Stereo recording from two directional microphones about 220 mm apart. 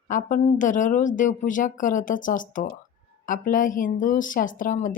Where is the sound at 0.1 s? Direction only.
35° left (ahead or behind).